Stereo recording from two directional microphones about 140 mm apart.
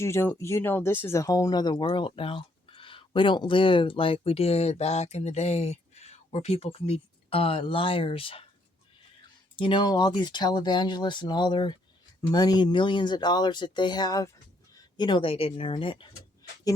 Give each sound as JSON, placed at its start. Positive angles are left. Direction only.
{"t": 0.0, "sound": "speech", "side_deg": 20}
{"t": 9.6, "sound": "speech", "side_deg": 35}